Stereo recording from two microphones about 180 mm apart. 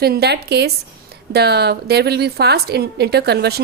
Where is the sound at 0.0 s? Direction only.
60° right (ahead or behind).